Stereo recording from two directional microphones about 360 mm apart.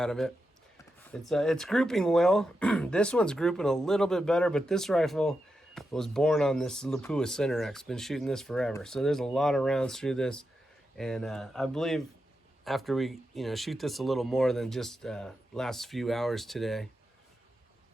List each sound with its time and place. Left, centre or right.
0.0 s speech: centre